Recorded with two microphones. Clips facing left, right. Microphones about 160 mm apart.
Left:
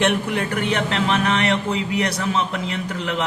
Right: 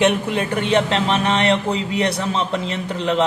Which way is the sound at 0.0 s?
20° right (ahead or behind).